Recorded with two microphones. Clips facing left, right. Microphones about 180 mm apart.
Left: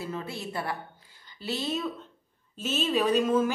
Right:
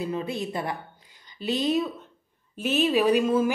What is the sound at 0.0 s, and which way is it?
A woman's voice, 15° right (ahead or behind).